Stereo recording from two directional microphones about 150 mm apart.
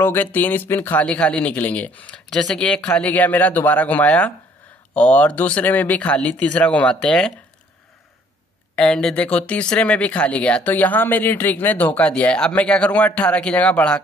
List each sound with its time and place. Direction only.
0.0 s speech: 15° left (ahead or behind)
8.7 s speech: 5° left (ahead or behind)